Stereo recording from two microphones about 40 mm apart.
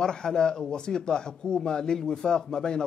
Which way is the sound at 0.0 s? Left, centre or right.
Centre.